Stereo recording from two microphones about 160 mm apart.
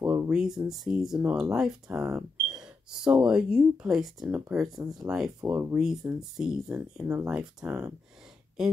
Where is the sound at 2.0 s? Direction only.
15° right (ahead or behind).